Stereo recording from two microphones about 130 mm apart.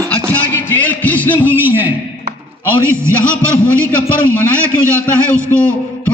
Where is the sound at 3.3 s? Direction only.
10° left (ahead or behind).